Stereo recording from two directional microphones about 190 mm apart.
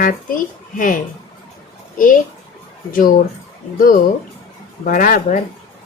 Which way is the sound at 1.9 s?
45° left (ahead or behind).